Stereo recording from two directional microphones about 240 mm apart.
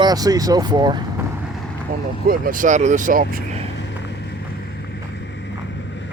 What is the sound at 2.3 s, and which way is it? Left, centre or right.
Speech, right.